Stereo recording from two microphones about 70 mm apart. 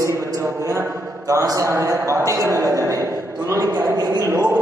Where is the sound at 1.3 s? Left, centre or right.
Right.